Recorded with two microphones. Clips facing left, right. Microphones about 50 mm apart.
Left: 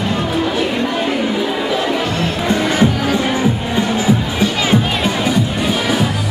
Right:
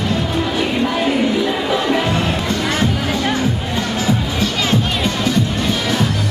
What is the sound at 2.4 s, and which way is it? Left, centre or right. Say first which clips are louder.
Music: left 4 dB; centre.